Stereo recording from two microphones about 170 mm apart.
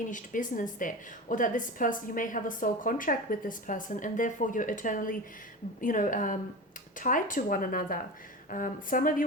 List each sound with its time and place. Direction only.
0.1 s a woman's voice: 50° left (ahead or behind)